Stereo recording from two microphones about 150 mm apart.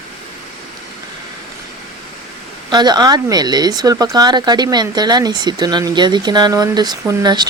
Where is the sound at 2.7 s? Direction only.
30° right (ahead or behind).